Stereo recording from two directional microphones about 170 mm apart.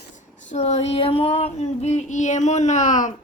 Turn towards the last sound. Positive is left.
turn(degrees=45)  # may be behind; listen again after turning